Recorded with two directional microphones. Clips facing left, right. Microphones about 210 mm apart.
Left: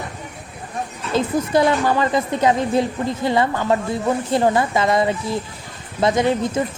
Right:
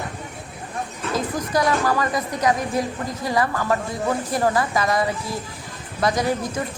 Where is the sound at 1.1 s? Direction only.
25° left (ahead or behind).